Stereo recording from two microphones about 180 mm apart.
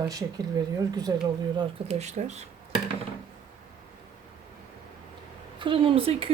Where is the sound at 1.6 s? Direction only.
35° right (ahead or behind).